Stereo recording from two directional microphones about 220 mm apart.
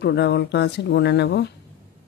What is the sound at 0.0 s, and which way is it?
Speech, 50° left (ahead or behind).